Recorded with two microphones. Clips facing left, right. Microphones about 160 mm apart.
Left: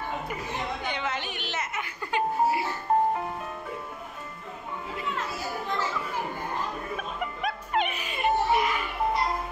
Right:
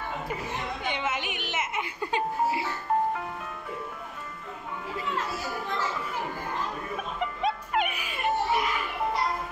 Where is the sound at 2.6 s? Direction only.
30° left (ahead or behind).